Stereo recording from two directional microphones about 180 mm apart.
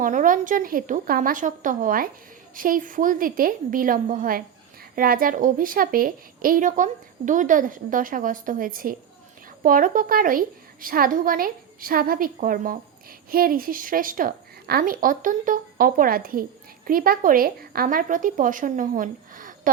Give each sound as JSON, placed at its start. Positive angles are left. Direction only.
{"t": 0.0, "sound": "a woman's voice", "side_deg": -45}